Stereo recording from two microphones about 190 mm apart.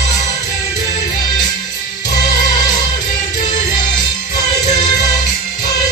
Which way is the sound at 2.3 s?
45° left (ahead or behind).